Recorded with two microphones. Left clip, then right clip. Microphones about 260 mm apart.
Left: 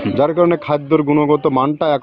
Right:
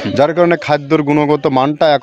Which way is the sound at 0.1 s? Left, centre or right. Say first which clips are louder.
Right 3 dB; right.